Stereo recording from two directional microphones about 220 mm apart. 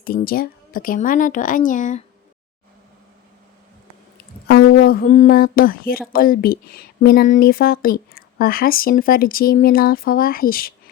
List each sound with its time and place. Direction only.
0.0 s a woman's voice: 40° left (ahead or behind)
4.6 s a sound: 75° left (ahead or behind)
4.9 s a woman's voice: 40° left (ahead or behind)